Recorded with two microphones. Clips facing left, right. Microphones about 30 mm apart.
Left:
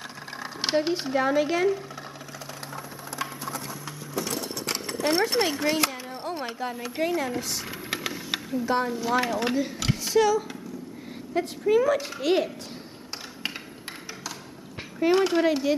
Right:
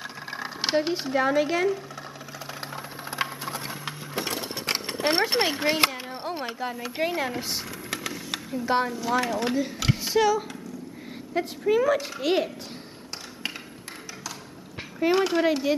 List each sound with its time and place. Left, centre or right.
0.6 s speech: centre
2.7 s sewing machine: right
5.9 s a sound: centre
7.0 s a woman's voice: centre
7.9 s vehicle: centre
8.7 s a woman's voice: right
9.0 s a woman's voice: centre
15.0 s speech: centre